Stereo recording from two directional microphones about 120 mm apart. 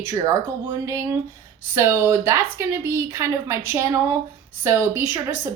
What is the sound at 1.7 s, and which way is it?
Speech, 25° right (ahead or behind).